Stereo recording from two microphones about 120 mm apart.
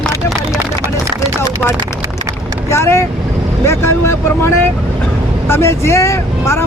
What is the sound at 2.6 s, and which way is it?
Speech, 20° left (ahead or behind).